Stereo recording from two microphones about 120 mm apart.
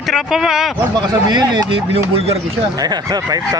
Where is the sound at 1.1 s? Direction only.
35° right (ahead or behind).